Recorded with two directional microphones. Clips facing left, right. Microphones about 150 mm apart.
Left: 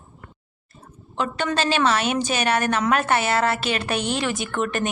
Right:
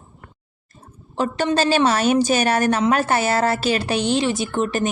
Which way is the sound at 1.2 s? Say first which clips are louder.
Right 4 dB; 40° right (ahead or behind).